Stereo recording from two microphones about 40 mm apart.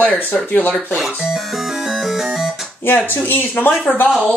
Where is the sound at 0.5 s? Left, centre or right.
Left.